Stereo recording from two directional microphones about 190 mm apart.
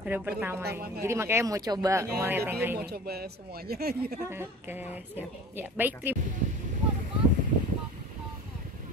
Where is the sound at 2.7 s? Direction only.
55° right (ahead or behind).